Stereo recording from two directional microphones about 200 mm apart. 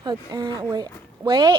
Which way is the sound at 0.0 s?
20° right (ahead or behind).